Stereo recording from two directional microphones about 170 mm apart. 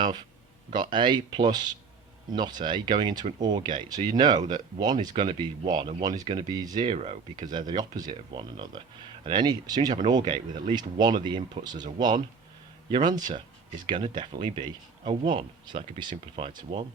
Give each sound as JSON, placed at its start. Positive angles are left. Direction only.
{"t": 0.7, "sound": "speech", "side_deg": -25}